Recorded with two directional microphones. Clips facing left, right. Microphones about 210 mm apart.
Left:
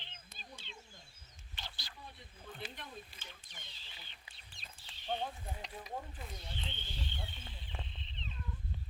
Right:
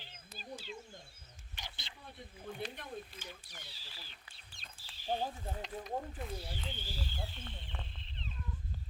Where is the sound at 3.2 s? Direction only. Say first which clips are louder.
Right 5 dB; 10° right (ahead or behind).